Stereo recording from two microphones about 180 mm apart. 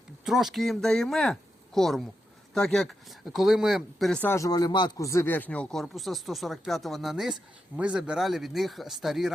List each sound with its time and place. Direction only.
0.3 s speech: centre (ahead or behind)